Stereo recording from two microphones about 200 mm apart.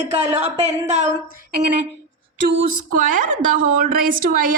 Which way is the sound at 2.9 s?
40° right (ahead or behind).